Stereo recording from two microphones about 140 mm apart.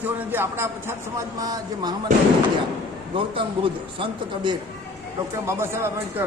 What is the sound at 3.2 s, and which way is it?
Speech, 40° right (ahead or behind).